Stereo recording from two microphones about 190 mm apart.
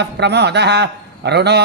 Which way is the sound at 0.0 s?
65° right (ahead or behind).